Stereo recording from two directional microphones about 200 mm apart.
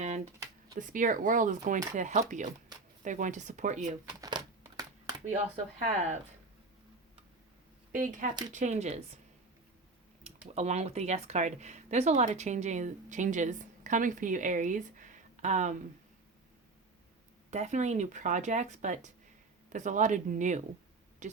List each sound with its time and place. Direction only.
0.8 s speech: 40° right (ahead or behind)
4.2 s a sound: 20° right (ahead or behind)
5.8 s speech: 35° right (ahead or behind)
8.0 s speech: 40° right (ahead or behind)
10.5 s speech: 35° right (ahead or behind)
17.5 s speech: 35° right (ahead or behind)